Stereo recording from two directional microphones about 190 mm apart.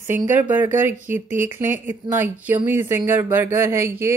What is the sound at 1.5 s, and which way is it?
Speech, 10° right (ahead or behind).